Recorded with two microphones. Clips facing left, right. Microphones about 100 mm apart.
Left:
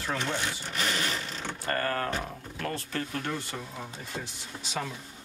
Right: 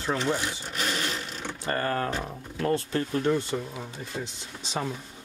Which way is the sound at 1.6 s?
20° right (ahead or behind).